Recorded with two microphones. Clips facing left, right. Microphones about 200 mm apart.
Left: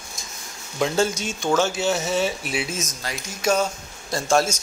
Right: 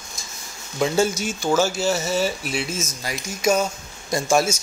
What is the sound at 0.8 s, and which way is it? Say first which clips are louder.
Speech: right 2 dB; 5° right (ahead or behind).